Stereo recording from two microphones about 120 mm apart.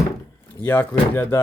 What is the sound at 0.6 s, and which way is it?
Speech, 15° left (ahead or behind).